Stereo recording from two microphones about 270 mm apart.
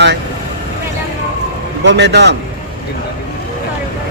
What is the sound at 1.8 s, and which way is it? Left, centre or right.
Speech, right.